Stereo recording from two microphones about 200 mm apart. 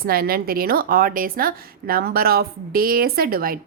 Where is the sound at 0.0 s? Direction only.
50° right (ahead or behind).